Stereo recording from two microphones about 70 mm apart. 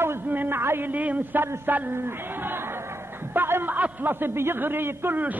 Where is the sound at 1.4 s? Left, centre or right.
Right.